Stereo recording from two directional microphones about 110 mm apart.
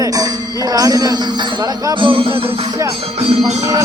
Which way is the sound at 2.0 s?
50° right (ahead or behind).